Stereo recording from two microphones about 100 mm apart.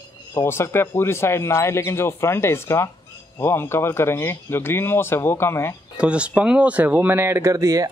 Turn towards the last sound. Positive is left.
turn(degrees=-35)  # may be behind; listen again after turning